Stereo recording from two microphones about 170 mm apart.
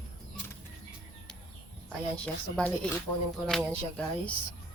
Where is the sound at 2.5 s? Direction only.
5° left (ahead or behind).